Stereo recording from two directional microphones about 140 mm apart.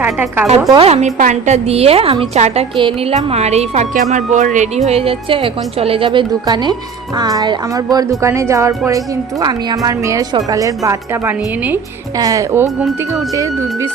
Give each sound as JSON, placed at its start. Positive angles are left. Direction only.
{"t": 0.0, "sound": "a woman's voice", "side_deg": -15}
{"t": 0.7, "sound": "a woman's voice", "side_deg": -45}
{"t": 4.1, "sound": "speech", "side_deg": -60}
{"t": 4.9, "sound": "a woman's voice", "side_deg": -45}